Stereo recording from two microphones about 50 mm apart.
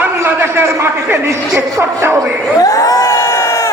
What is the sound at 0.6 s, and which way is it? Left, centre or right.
Speech, right.